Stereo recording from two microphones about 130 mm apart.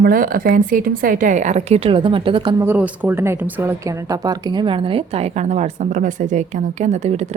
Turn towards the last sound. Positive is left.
turn(degrees=-60)  # may be behind; listen again after turning